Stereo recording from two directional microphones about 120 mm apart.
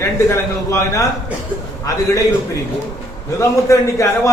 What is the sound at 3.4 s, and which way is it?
Speech, 25° left (ahead or behind).